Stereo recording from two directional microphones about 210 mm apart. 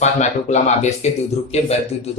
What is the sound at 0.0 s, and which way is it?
Speech, 35° left (ahead or behind).